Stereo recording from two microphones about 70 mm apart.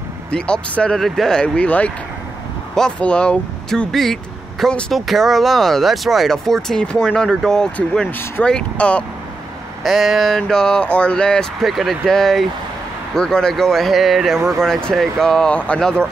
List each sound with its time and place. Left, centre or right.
0.3 s speech: centre
0.9 s speech: centre
3.0 s speech: centre
3.9 s speech: centre
9.8 s speech: centre
11.6 s speech: centre
14.6 s speech: centre
15.5 s speech: centre